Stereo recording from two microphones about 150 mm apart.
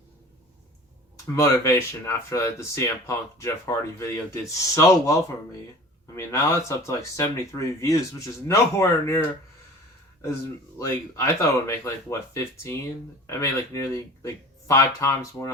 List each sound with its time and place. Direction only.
1.4 s speech: 20° left (ahead or behind)
10.8 s speech: 20° left (ahead or behind)